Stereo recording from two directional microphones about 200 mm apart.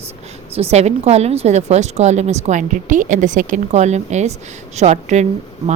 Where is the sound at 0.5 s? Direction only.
30° right (ahead or behind).